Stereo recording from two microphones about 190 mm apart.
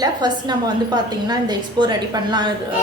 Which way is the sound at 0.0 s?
20° right (ahead or behind).